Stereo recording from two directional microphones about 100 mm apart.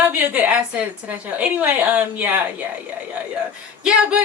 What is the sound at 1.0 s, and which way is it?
A woman's voice, 15° right (ahead or behind).